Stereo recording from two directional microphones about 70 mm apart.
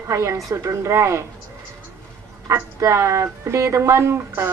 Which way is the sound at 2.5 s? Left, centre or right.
Right.